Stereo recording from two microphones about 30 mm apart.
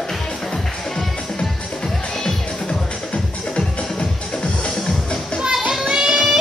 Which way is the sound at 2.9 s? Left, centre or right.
Left.